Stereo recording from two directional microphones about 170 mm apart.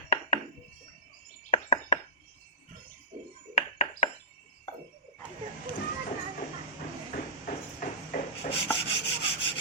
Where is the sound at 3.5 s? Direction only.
50° left (ahead or behind).